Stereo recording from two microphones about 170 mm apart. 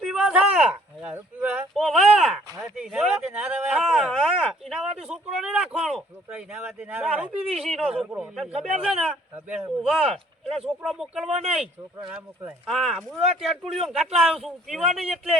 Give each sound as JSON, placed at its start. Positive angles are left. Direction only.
{"t": 0.0, "sound": "speech", "side_deg": -5}
{"t": 4.9, "sound": "a sound", "side_deg": -5}
{"t": 6.2, "sound": "a man's voice", "side_deg": -5}
{"t": 11.3, "sound": "speech", "side_deg": -40}
{"t": 12.6, "sound": "speech", "side_deg": 0}